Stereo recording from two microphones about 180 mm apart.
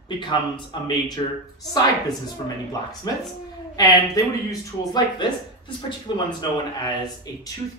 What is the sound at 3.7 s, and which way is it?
Speech, 20° left (ahead or behind).